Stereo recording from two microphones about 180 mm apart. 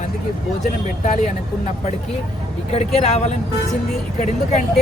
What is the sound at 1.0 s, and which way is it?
Speech, 40° left (ahead or behind).